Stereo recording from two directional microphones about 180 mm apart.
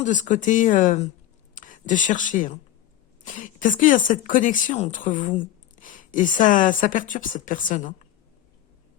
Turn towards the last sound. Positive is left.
turn(degrees=45)  # may be behind; listen again after turning